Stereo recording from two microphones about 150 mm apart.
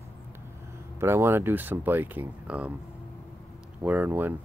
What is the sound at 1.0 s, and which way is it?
Speech, 15° right (ahead or behind).